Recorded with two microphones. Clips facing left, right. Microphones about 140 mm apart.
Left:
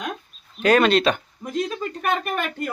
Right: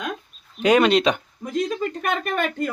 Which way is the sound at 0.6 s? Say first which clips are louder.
Right 1 dB; 15° right (ahead or behind).